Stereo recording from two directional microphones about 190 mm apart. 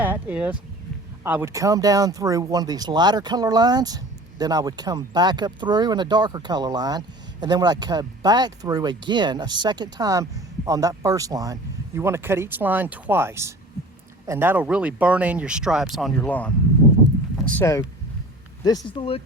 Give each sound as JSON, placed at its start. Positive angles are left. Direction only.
{"t": 0.0, "sound": "a sound", "side_deg": -10}
{"t": 1.2, "sound": "speech", "side_deg": -10}
{"t": 17.5, "sound": "speech", "side_deg": 15}